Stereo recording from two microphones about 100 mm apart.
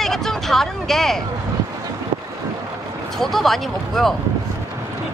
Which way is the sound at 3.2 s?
Centre (ahead or behind).